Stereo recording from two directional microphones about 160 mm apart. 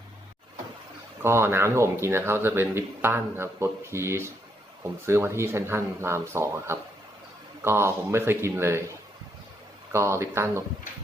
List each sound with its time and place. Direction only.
1.2 s speech: 15° right (ahead or behind)
9.9 s speech: 15° right (ahead or behind)